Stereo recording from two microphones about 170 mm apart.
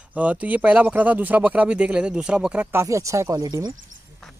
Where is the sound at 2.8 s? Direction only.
20° right (ahead or behind).